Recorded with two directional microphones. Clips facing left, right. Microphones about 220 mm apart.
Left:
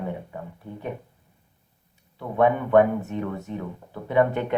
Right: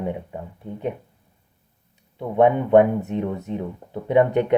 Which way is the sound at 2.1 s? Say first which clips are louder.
Right 4 dB; 20° right (ahead or behind).